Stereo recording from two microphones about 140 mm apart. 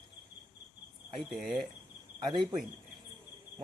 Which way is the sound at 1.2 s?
Centre (ahead or behind).